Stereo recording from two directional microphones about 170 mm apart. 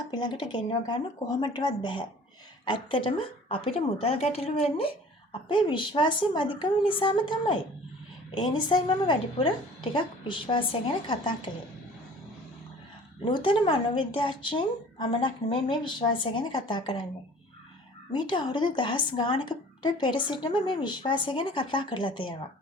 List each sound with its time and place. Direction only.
0.1 s a woman's voice: 25° left (ahead or behind)
13.2 s speech: 30° left (ahead or behind)
18.1 s speech: 25° left (ahead or behind)